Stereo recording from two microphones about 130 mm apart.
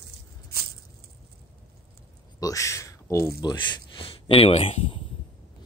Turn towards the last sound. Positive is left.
turn(degrees=45)  # may be behind; listen again after turning